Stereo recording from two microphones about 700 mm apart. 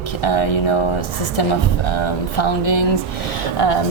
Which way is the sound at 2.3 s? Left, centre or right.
Left.